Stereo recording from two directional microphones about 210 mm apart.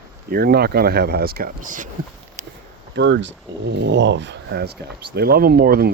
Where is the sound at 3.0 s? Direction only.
60° right (ahead or behind).